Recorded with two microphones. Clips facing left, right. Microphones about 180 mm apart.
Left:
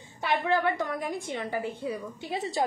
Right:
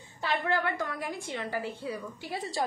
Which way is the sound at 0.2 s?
20° left (ahead or behind).